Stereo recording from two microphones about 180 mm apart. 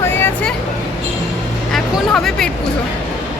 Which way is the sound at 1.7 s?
Centre (ahead or behind).